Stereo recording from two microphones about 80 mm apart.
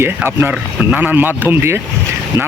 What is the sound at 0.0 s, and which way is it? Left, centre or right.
Speech, right.